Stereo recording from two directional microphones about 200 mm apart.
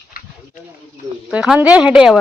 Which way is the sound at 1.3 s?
5° right (ahead or behind).